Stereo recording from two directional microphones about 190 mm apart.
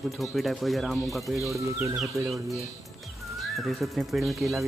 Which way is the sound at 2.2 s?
15° right (ahead or behind).